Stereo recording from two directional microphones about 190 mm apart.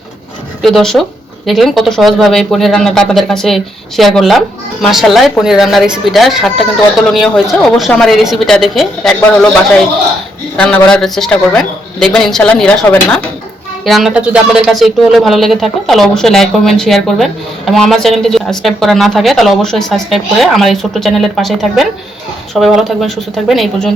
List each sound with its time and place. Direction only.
0.6 s speech: centre (ahead or behind)
10.6 s speech: 5° left (ahead or behind)